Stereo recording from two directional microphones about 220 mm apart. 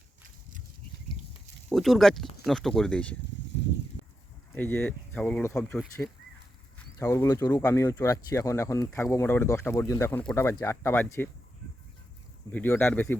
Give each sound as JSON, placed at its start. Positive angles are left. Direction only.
{"t": 1.7, "sound": "speech", "side_deg": 0}
{"t": 4.5, "sound": "speech", "side_deg": 10}
{"t": 12.5, "sound": "speech", "side_deg": 10}